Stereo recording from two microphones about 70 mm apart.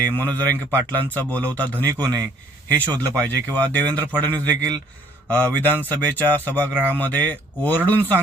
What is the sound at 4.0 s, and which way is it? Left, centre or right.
Speech, left.